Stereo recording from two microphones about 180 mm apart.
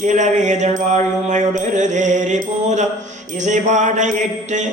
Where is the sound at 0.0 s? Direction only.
40° right (ahead or behind).